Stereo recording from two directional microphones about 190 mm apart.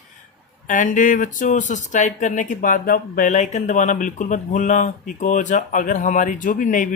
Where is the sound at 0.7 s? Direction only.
45° left (ahead or behind).